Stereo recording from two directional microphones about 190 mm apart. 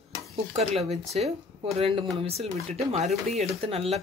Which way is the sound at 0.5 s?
35° right (ahead or behind).